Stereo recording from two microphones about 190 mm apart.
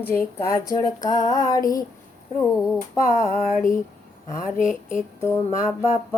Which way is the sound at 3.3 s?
45° left (ahead or behind).